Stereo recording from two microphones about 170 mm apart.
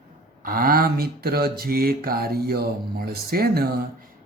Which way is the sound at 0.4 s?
60° right (ahead or behind).